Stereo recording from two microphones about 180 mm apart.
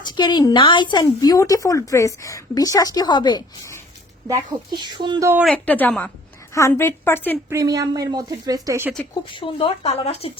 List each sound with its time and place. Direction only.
0.0 s speech: 25° left (ahead or behind)
4.3 s speech: 25° right (ahead or behind)
5.3 s speech: 5° right (ahead or behind)
5.6 s a woman's voice: 10° left (ahead or behind)
7.5 s speech: 20° right (ahead or behind)
9.3 s speech: 30° left (ahead or behind)